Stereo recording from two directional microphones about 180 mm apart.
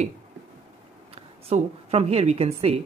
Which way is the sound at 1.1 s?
35° right (ahead or behind).